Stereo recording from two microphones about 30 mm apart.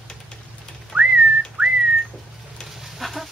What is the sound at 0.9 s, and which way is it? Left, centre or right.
Whistling, right.